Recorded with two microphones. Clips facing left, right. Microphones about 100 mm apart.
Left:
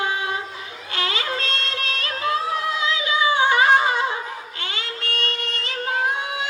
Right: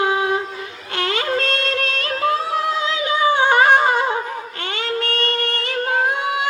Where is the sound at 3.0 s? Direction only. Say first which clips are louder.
Right 3 dB; 50° right (ahead or behind).